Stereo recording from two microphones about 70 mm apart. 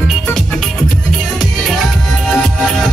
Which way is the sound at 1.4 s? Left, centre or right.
Centre.